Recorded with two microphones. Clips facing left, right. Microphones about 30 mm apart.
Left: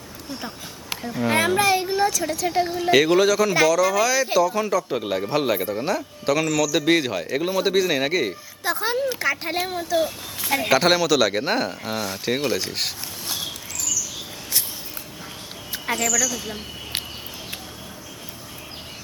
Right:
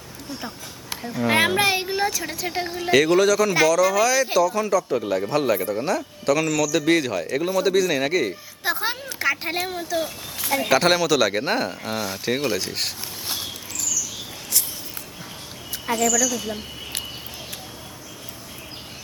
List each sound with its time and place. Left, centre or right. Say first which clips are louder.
1.0 s speech: even; centre
1.3 s a woman's voice: even; right; by 2.9 s centre
2.9 s speech: even; centre
4.4 s a man's voice: right 1 dB; centre
8.6 s a woman's voice: left 3 dB; centre
15.7 s a sound: right 1 dB; left
16.0 s a man's voice: right 2 dB; centre